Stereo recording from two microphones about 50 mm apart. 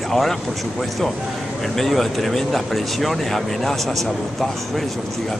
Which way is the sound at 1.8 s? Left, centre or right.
Centre.